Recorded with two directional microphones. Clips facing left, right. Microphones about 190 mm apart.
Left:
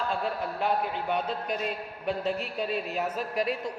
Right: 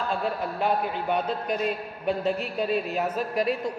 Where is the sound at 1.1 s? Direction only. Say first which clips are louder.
Right 4 dB; 45° right (ahead or behind).